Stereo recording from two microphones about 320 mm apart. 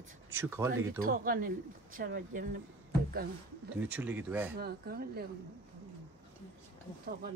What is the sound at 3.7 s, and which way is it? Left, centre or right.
Speech, centre.